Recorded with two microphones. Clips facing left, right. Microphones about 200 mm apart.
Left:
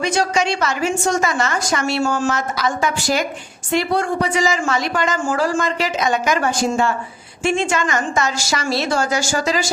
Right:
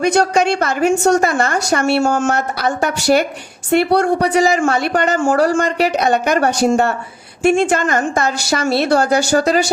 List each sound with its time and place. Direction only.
0.0 s a woman's voice: 60° right (ahead or behind)